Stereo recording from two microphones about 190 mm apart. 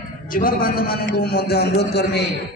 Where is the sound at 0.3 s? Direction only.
50° left (ahead or behind).